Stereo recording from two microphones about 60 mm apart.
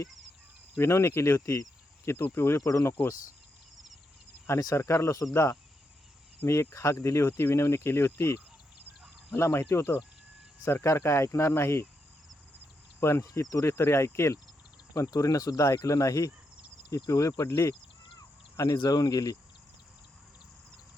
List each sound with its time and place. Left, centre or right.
0.8 s speech: left
2.0 s speech: left
2.6 s speech: left
4.4 s speech: left
13.0 s speech: left
13.3 s speech: left
13.7 s speech: left
15.0 s speech: left
17.3 s speech: left
18.2 s speech: left